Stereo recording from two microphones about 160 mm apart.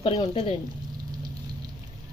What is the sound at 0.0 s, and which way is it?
Speech, 35° left (ahead or behind).